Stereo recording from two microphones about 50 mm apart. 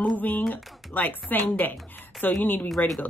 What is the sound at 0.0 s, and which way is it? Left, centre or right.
Speech, left.